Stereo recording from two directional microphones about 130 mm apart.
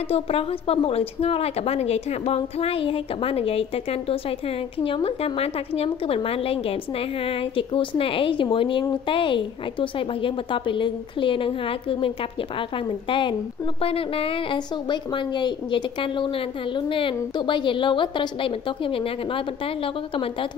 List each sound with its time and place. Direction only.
0.1 s a woman's voice: 50° left (ahead or behind)